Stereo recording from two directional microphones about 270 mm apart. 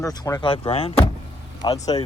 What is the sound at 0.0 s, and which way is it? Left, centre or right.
Speech, centre.